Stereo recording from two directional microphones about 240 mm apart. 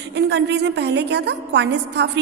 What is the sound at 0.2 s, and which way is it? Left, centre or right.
A woman's voice, right.